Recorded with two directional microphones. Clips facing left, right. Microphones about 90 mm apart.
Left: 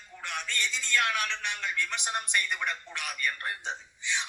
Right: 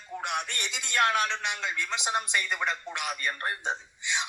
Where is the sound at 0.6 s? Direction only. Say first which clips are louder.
Left 1 dB; 65° right (ahead or behind).